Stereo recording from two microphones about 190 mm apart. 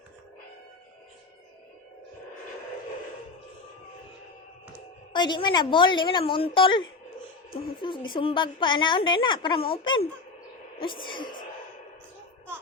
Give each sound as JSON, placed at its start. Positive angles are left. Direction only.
{"t": 5.1, "sound": "a woman's voice", "side_deg": 25}